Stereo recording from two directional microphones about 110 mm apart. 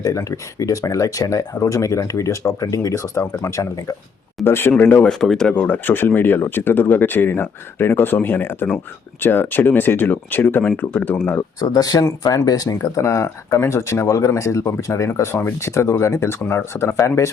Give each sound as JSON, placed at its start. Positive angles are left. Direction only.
{"t": 0.0, "sound": "speech", "side_deg": 30}
{"t": 5.2, "sound": "speech", "side_deg": 5}
{"t": 11.6, "sound": "speech", "side_deg": 35}